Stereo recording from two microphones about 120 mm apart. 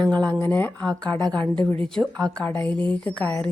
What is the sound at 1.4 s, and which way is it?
Speech, 45° right (ahead or behind).